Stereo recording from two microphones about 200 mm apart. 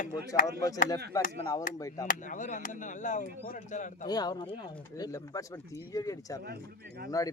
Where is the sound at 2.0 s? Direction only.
40° left (ahead or behind).